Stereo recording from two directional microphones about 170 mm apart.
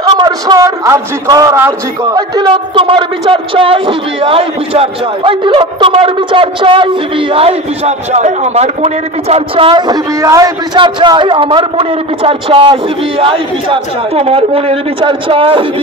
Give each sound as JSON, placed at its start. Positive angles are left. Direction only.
{"t": 0.0, "sound": "a man's voice", "side_deg": -20}